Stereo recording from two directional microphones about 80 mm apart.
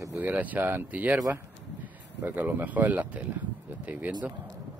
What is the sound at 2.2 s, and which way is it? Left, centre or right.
Speech, right.